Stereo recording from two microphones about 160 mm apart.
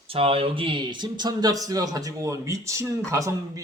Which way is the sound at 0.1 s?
35° right (ahead or behind).